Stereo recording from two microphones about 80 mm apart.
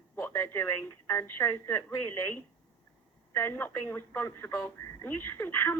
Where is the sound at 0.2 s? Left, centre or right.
Left.